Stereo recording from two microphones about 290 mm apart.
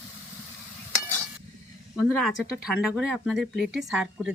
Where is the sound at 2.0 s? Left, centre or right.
Centre.